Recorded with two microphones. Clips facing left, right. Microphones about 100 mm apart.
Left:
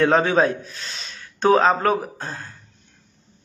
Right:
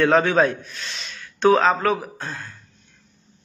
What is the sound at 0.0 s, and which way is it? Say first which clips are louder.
A man's voice: even; 30° left (ahead or behind).